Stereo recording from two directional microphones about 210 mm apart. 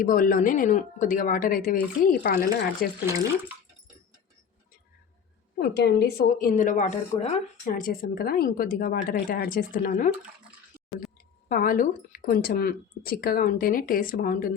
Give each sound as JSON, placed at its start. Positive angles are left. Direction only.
{"t": 0.0, "sound": "a woman's voice", "side_deg": 40}
{"t": 5.5, "sound": "a woman's voice", "side_deg": 50}
{"t": 11.4, "sound": "speech", "side_deg": 45}